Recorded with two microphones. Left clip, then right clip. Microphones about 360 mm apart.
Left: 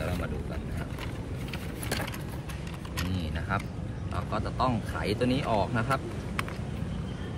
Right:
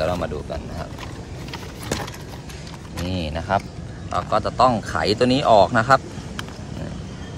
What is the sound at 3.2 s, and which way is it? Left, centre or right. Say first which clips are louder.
Vehicle: right 13 dB; centre.